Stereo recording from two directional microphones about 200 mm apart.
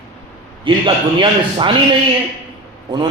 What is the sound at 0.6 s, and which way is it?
A man's voice, 25° right (ahead or behind).